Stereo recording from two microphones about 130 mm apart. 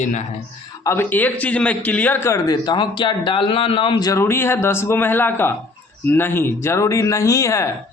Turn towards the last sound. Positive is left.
turn(degrees=25)  # may be behind; listen again after turning